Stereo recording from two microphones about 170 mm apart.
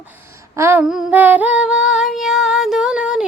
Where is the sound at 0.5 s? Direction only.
15° right (ahead or behind).